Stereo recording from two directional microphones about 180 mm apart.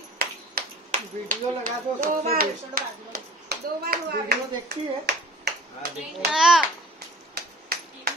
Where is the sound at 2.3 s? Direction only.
55° right (ahead or behind).